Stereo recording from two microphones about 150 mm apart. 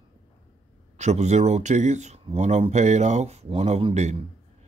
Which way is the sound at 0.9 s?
50° right (ahead or behind).